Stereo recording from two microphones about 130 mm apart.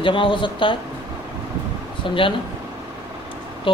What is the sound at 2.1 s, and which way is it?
Speech, 40° left (ahead or behind).